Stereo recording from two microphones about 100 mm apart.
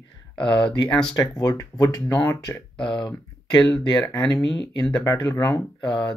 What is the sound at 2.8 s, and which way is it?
Speech, 55° left (ahead or behind).